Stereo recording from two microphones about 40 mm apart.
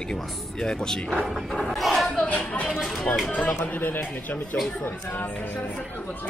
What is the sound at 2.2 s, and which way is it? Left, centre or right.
Speech, left.